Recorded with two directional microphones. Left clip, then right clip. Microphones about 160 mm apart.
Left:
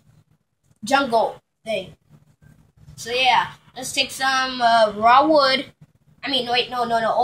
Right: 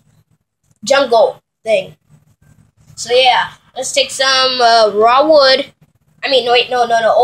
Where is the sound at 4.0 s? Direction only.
55° right (ahead or behind).